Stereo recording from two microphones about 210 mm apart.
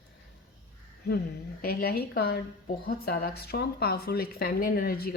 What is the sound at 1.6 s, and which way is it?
Speech, 45° left (ahead or behind).